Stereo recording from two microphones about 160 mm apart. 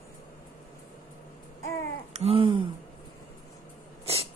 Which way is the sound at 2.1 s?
40° right (ahead or behind).